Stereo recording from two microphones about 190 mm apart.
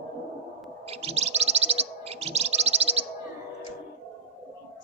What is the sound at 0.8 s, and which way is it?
Bird, 35° right (ahead or behind).